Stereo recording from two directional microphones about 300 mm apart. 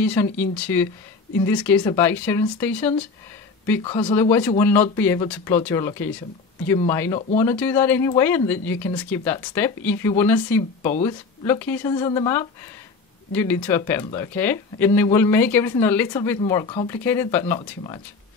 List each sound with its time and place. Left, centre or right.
0.0 s speech: centre